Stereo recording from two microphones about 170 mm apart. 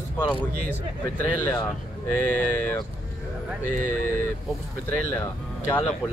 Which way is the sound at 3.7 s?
55° right (ahead or behind).